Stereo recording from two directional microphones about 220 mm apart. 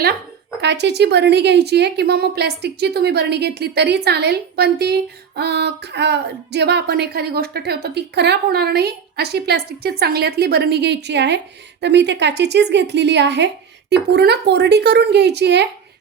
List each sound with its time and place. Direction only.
0.6 s speech: 50° right (ahead or behind)